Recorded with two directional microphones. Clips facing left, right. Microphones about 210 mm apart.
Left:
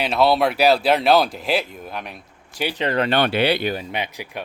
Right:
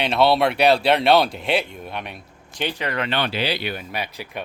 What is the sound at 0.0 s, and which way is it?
Speech, centre (ahead or behind).